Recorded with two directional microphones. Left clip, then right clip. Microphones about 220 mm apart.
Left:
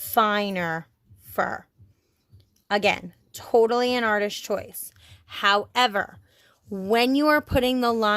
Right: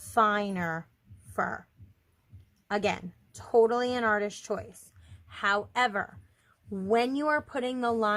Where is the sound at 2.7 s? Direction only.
35° left (ahead or behind).